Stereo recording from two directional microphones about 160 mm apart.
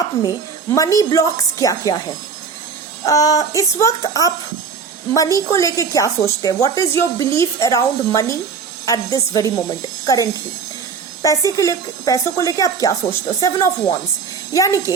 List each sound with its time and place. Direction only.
0.7 s a woman's voice: 20° left (ahead or behind)
3.0 s a woman's voice: 20° left (ahead or behind)
11.2 s a woman's voice: 20° left (ahead or behind)